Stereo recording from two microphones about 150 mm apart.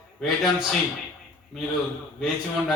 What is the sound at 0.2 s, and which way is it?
A man's voice, centre (ahead or behind).